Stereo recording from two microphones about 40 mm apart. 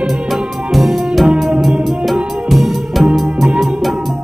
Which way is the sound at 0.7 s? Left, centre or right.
Centre.